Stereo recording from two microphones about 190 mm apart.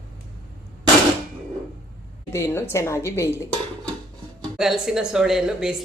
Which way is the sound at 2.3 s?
15° left (ahead or behind).